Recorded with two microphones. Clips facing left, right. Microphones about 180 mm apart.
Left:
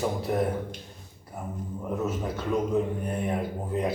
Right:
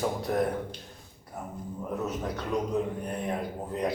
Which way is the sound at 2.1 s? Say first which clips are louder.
Left 3 dB; centre (ahead or behind).